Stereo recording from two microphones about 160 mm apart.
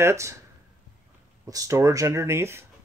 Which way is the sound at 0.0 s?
15° right (ahead or behind).